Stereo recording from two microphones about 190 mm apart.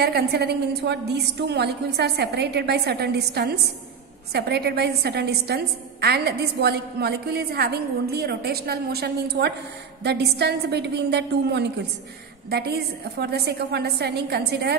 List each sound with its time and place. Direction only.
0.0 s a woman's voice: 60° right (ahead or behind)